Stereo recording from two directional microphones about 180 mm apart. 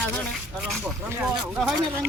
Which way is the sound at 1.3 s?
5° right (ahead or behind).